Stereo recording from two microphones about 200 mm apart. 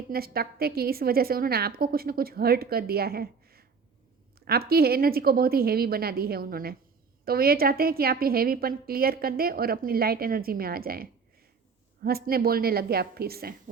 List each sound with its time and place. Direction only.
0.1 s a woman's voice: 50° right (ahead or behind)